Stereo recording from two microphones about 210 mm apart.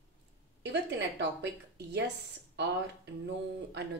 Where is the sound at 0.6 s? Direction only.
55° right (ahead or behind).